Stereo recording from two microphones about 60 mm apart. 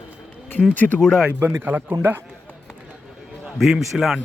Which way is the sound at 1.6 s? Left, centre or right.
Right.